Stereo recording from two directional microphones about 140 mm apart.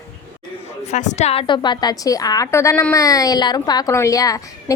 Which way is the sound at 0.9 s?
60° left (ahead or behind).